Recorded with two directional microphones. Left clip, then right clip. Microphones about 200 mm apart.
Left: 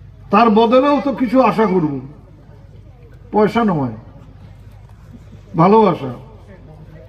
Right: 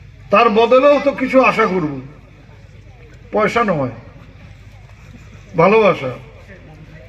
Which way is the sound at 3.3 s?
45° right (ahead or behind).